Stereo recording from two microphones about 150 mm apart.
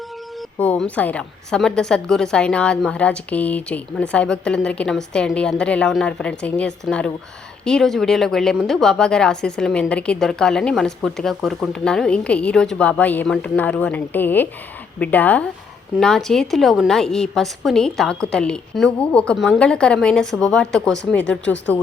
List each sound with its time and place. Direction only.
0.6 s a woman's voice: 10° left (ahead or behind)